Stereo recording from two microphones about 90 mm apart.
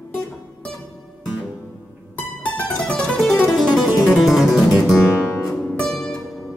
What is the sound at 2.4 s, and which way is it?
Music, 15° left (ahead or behind).